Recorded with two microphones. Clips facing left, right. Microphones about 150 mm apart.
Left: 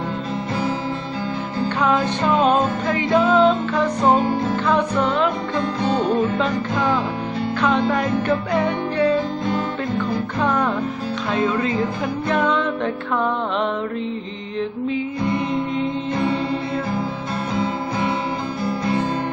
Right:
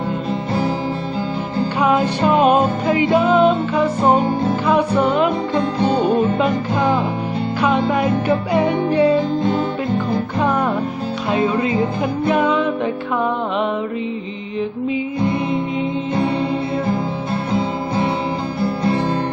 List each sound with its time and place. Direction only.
1.8 s music: 10° right (ahead or behind)
4.3 s music: 30° right (ahead or behind)
4.6 s music: 10° right (ahead or behind)
6.2 s music: 25° right (ahead or behind)
7.6 s music: 5° right (ahead or behind)
10.4 s music: 10° right (ahead or behind)
17.5 s music: 30° right (ahead or behind)